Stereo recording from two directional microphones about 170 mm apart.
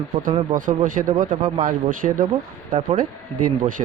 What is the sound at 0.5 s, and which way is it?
Speech, 55° right (ahead or behind).